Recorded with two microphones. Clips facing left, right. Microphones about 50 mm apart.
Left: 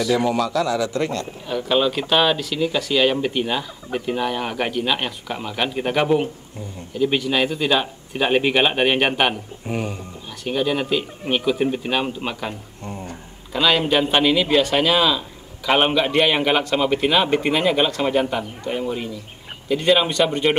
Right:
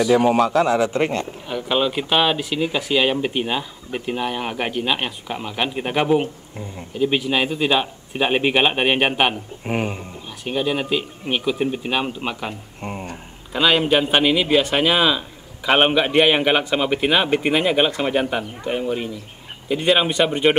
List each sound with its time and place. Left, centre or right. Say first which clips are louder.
0.1 s speech: right 4 dB; right
1.5 s a man's voice: left 2 dB; centre
9.7 s speech: right 3 dB; right
10.4 s a man's voice: left 1 dB; centre
12.8 s speech: right 3 dB; right
13.5 s a man's voice: right 1 dB; centre